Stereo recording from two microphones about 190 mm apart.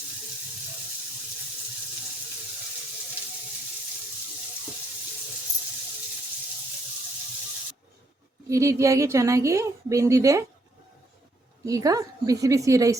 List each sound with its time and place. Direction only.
8.4 s a woman's voice: 15° right (ahead or behind)
11.6 s a woman's voice: 20° right (ahead or behind)